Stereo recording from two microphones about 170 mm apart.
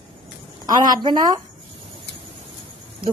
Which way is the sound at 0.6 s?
25° right (ahead or behind).